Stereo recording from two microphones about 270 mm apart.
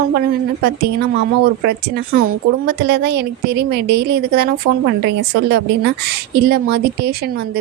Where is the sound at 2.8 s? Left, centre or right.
Right.